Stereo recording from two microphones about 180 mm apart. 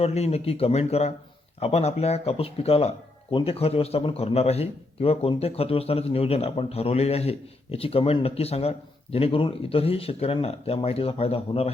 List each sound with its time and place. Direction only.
0.0 s a man's voice: 35° left (ahead or behind)